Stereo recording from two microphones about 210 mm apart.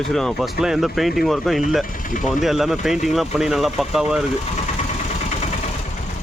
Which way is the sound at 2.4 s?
Centre (ahead or behind).